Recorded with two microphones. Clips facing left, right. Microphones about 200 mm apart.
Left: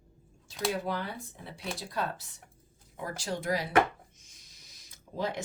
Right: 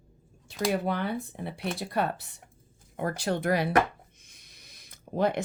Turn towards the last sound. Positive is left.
turn(degrees=-60)  # may be behind; listen again after turning